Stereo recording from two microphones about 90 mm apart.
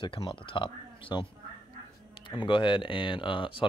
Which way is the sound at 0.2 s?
65° left (ahead or behind).